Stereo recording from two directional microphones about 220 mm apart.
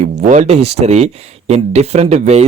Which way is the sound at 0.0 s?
35° right (ahead or behind).